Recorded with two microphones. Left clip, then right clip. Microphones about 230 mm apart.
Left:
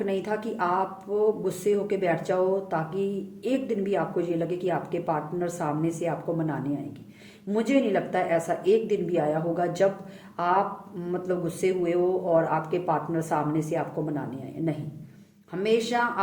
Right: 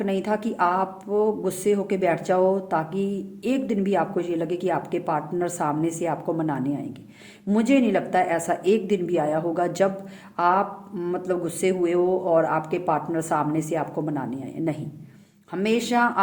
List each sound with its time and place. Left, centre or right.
0.0 s speech: right